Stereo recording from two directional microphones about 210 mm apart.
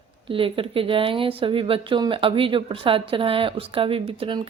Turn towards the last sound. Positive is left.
turn(degrees=-25)  # may be behind; listen again after turning